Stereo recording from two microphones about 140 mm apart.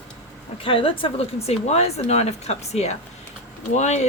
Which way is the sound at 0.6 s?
40° left (ahead or behind).